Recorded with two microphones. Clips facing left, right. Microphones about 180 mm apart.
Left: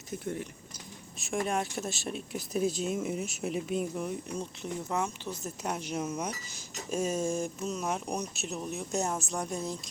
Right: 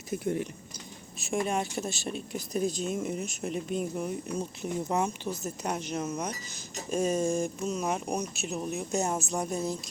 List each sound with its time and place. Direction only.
0.1 s speech: 15° right (ahead or behind)
1.2 s speech: centre (ahead or behind)
4.9 s speech: 15° right (ahead or behind)
5.4 s speech: centre (ahead or behind)